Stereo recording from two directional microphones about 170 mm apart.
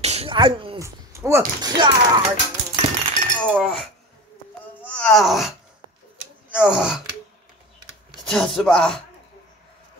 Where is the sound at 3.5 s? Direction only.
Centre (ahead or behind).